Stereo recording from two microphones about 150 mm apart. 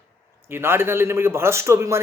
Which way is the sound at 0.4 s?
15° right (ahead or behind).